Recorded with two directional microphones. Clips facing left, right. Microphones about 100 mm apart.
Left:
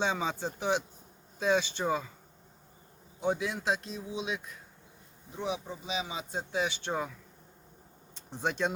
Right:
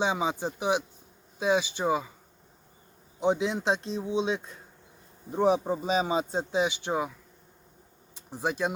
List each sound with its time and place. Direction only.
0.0 s speech: 15° right (ahead or behind)
3.2 s a man's voice: 20° right (ahead or behind)
5.3 s speech: 40° right (ahead or behind)
6.5 s speech: 15° right (ahead or behind)
8.1 s speech: 10° right (ahead or behind)